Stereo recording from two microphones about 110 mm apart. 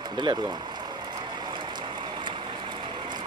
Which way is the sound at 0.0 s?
40° right (ahead or behind).